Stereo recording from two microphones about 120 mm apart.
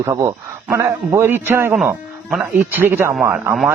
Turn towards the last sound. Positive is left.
turn(degrees=-20)  # may be behind; listen again after turning